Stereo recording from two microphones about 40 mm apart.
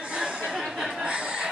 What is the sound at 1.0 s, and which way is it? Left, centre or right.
Speech, right.